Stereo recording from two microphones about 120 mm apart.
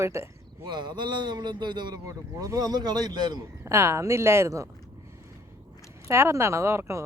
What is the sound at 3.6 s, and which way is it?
A woman's voice, 20° right (ahead or behind).